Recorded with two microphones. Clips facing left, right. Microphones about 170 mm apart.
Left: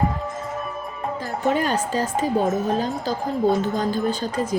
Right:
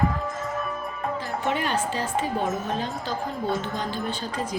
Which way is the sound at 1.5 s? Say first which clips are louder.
Left 5 dB; 40° left (ahead or behind).